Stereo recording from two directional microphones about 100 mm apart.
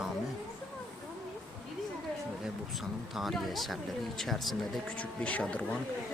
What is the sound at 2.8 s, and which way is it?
Speech, centre (ahead or behind).